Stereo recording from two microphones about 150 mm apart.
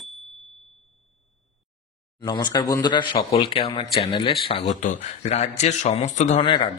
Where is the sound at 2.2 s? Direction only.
25° left (ahead or behind).